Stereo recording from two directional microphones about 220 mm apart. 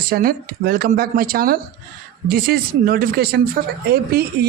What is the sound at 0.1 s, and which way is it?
Speech, 40° right (ahead or behind).